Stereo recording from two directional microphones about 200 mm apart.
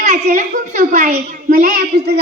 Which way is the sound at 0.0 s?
35° right (ahead or behind).